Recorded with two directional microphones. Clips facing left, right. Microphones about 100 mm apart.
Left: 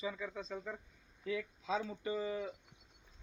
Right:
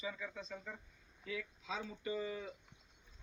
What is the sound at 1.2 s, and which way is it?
Speech, 30° left (ahead or behind).